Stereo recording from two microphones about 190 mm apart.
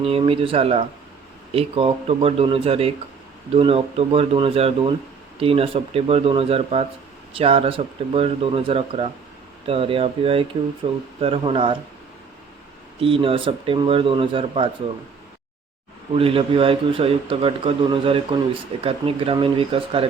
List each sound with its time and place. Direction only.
0.0 s speech: 30° right (ahead or behind)
13.0 s speech: 30° right (ahead or behind)
16.1 s speech: 30° right (ahead or behind)